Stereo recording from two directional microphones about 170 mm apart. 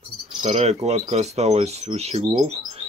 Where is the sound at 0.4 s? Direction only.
40° right (ahead or behind).